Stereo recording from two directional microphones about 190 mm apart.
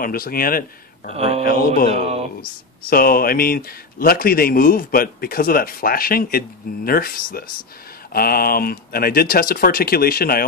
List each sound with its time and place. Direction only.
0.0 s a man's voice: 50° left (ahead or behind)
1.1 s speech: 30° right (ahead or behind)
1.4 s a man's voice: 50° left (ahead or behind)
1.9 s speech: 35° right (ahead or behind)
2.9 s a man's voice: 50° left (ahead or behind)